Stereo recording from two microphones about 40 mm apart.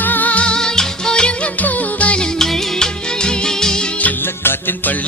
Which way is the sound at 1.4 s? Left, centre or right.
Left.